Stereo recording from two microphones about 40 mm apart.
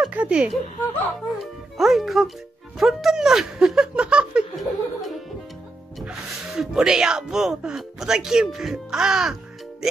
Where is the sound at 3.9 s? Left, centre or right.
Right.